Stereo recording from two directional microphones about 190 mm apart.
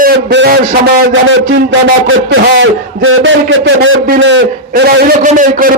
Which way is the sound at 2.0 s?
90° right.